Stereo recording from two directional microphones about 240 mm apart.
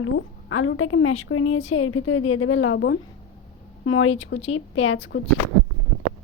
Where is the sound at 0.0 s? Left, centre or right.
Left.